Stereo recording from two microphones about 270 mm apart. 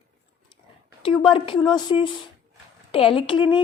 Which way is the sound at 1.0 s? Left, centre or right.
Centre.